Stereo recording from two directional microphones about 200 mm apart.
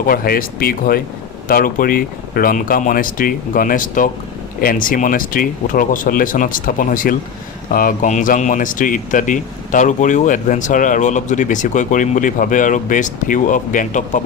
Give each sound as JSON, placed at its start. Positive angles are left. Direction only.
{"t": 0.1, "sound": "speech", "side_deg": 45}